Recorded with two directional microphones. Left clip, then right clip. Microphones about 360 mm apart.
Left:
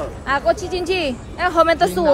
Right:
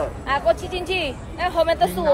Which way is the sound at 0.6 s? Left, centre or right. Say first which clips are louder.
Left 3 dB; left.